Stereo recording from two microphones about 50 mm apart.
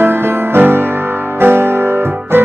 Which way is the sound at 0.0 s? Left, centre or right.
Right.